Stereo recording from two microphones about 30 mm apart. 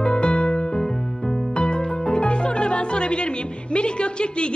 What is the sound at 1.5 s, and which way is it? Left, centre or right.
Speech, left.